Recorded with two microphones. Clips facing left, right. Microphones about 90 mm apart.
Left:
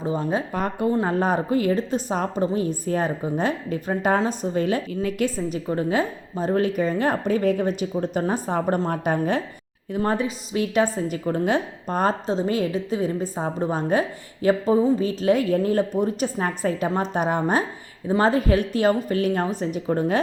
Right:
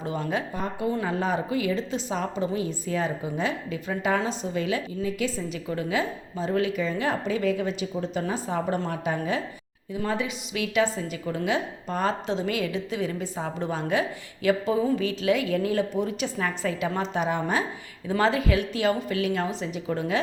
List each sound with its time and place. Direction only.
0.0 s a woman's voice: 35° left (ahead or behind)
0.5 s speech: 65° left (ahead or behind)
0.9 s a woman's voice: 40° left (ahead or behind)